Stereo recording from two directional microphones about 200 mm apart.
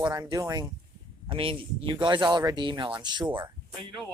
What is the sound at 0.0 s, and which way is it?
Speech, 20° right (ahead or behind).